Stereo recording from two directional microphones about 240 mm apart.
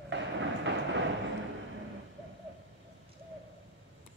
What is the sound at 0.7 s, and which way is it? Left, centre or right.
Train, right.